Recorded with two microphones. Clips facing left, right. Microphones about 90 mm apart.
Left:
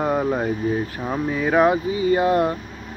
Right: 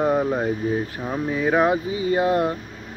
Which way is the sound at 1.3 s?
15° right (ahead or behind).